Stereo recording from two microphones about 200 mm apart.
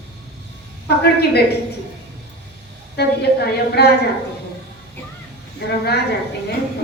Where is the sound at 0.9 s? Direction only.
55° left (ahead or behind).